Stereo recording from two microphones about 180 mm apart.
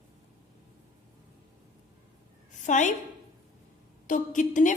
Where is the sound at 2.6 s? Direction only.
45° left (ahead or behind).